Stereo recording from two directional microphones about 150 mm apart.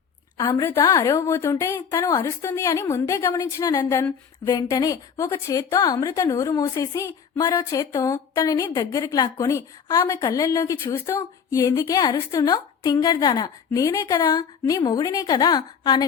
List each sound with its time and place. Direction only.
0.3 s a woman's voice: 30° left (ahead or behind)
0.6 s a woman's voice: 20° left (ahead or behind)